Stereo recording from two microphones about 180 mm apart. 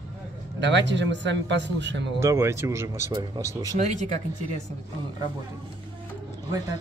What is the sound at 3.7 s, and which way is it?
Speech, 45° right (ahead or behind).